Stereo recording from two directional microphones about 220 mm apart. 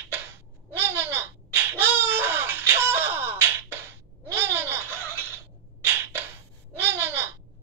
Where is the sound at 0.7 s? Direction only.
10° right (ahead or behind).